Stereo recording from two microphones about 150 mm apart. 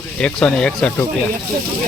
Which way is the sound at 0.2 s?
5° left (ahead or behind).